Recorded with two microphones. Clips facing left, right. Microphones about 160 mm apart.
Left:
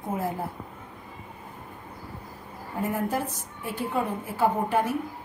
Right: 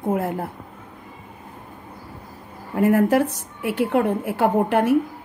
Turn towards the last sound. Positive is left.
turn(degrees=-70)  # may be behind; listen again after turning